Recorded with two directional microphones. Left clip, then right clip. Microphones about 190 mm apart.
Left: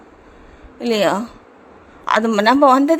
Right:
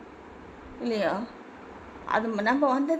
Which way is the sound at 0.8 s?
35° left (ahead or behind).